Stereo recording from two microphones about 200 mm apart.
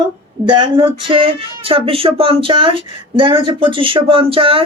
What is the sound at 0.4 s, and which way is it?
Speech, 25° right (ahead or behind).